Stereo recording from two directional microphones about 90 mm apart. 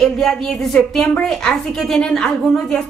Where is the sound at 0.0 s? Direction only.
5° left (ahead or behind).